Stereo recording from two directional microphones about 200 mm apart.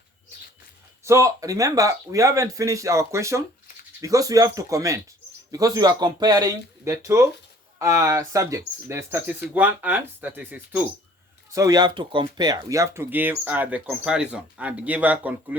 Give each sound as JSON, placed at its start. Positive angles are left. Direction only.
{"t": 1.0, "sound": "speech", "side_deg": -15}